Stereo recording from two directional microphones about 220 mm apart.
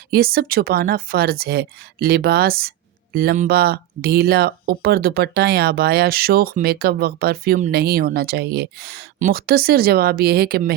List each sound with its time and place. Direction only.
0.1 s speech: 45° right (ahead or behind)